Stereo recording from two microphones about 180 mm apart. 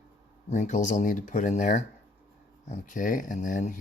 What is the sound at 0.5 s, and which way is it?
Speech, 45° left (ahead or behind).